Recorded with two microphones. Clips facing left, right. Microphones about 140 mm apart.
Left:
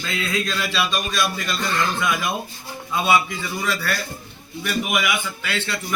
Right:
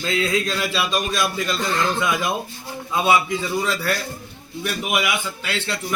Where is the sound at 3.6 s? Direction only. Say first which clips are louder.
Right 2 dB; 20° right (ahead or behind).